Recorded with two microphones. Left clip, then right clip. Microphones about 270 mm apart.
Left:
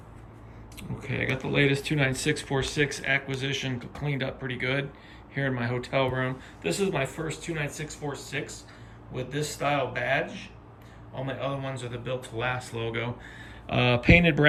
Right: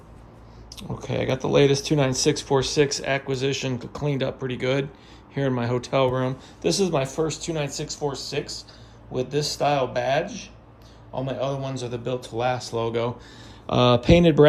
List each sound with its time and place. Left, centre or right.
1.0 s speech: centre